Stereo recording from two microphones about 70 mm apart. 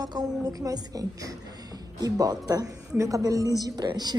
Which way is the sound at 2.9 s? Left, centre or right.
Right.